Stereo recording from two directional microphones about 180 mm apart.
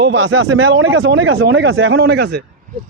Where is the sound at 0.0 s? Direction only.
90° right; by 2.4 s 70° right (ahead or behind).